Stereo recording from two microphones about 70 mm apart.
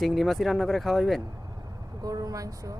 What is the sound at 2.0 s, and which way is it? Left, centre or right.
Speech, right.